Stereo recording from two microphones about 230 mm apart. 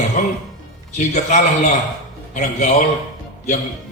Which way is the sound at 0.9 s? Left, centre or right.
Left.